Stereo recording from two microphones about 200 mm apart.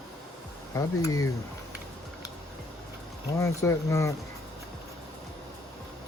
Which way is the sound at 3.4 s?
15° left (ahead or behind).